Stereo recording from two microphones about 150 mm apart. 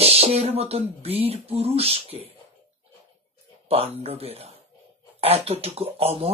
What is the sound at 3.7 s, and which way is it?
Speech, 40° right (ahead or behind).